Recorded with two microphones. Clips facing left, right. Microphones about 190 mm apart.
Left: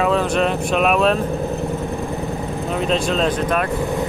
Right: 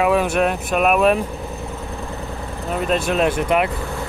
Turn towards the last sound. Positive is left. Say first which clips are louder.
# right 1 dB
turn(degrees=-15)  # may be behind; listen again after turning